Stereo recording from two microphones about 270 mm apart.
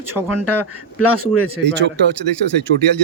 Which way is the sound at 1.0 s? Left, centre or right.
Right.